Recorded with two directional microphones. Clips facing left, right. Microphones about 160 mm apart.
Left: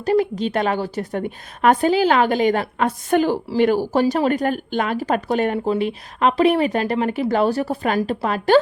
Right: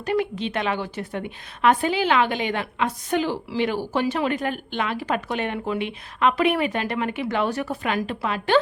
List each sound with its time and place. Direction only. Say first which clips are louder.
0.0 s a woman's voice: left 5 dB; 35° left (ahead or behind)